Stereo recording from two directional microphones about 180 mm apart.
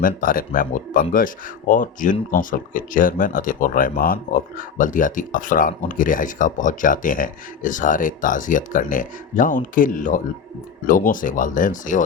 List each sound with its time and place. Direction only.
0.0 s speech: 50° left (ahead or behind)